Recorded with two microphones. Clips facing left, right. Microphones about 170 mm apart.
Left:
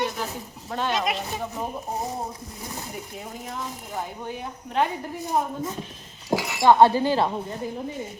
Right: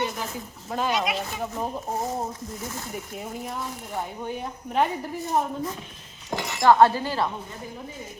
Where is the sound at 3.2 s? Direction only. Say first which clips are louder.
Right 2 dB; centre (ahead or behind).